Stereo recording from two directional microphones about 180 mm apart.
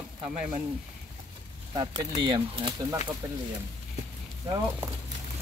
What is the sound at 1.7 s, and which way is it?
Speech, 25° right (ahead or behind).